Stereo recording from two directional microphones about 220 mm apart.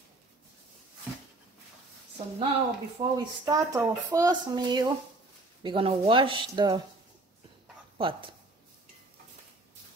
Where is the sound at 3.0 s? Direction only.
20° right (ahead or behind).